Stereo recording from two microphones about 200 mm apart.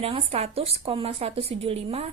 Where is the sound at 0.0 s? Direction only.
30° right (ahead or behind).